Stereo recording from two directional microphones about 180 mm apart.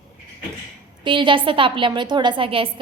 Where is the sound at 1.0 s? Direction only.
25° right (ahead or behind).